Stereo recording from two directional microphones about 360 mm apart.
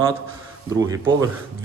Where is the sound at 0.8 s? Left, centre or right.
Centre.